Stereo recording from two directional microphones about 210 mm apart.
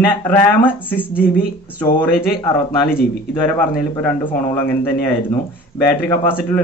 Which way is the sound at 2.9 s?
45° left (ahead or behind).